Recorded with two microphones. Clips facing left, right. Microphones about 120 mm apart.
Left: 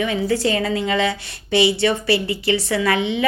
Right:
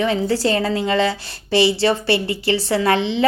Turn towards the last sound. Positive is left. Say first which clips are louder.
# right 2 dB
turn(degrees=-30)  # may be behind; listen again after turning